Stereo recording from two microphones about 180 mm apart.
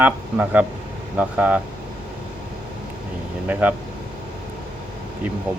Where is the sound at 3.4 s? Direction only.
10° right (ahead or behind).